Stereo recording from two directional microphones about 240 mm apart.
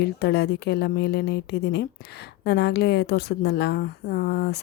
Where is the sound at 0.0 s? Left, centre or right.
Left.